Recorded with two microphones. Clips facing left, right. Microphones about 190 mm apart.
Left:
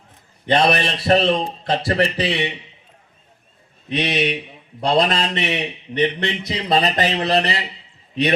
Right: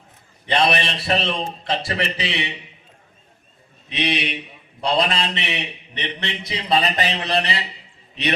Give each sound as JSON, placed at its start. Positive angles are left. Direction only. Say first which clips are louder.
{"t": 0.4, "sound": "a man's voice", "louder": "left 3 dB", "side_deg": 45}
{"t": 3.8, "sound": "a man's voice", "louder": "left 4 dB", "side_deg": 45}